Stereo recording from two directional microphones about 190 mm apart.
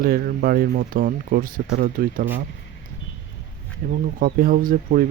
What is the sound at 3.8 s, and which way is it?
Speech, 55° right (ahead or behind).